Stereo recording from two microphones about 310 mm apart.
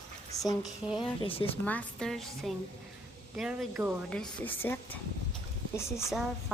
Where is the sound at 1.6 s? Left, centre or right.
Centre.